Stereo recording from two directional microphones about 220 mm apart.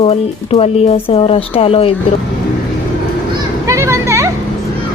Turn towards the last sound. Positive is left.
turn(degrees=-15)  # may be behind; listen again after turning